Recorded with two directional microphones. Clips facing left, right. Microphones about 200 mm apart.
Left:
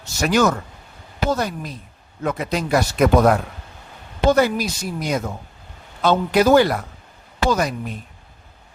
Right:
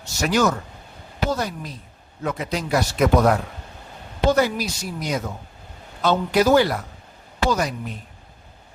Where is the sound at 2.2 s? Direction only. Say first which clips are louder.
Left 3 dB; 55° left (ahead or behind).